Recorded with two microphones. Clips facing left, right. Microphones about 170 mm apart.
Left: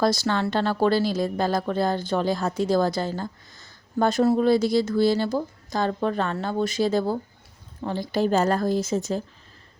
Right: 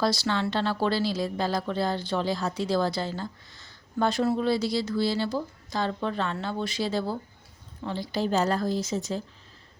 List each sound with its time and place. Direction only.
0.0 s a woman's voice: 50° left (ahead or behind)